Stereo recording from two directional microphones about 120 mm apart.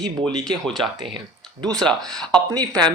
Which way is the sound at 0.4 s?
5° left (ahead or behind).